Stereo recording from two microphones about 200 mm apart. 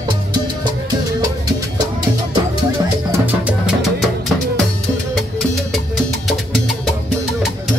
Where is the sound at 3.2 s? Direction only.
5° right (ahead or behind).